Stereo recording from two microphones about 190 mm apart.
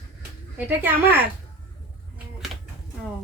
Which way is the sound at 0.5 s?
10° right (ahead or behind).